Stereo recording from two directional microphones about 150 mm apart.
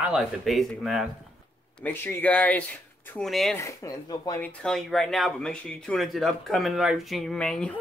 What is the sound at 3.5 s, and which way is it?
Speech, 20° left (ahead or behind).